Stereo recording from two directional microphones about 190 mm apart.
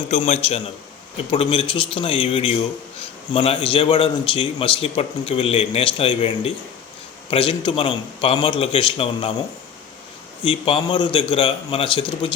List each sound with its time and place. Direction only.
0.1 s a man's voice: 35° left (ahead or behind)
10.4 s a man's voice: 25° left (ahead or behind)